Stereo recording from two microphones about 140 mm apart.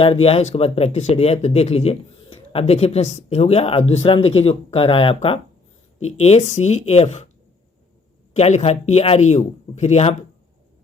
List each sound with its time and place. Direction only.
0.0 s speech: 45° left (ahead or behind)
8.3 s speech: 50° left (ahead or behind)